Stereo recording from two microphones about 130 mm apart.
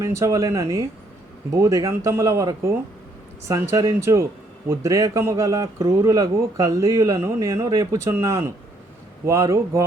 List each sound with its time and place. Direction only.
0.0 s a man's voice: 25° right (ahead or behind)